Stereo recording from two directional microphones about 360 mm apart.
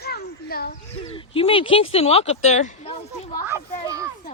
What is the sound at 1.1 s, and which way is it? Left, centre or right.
Speech, centre.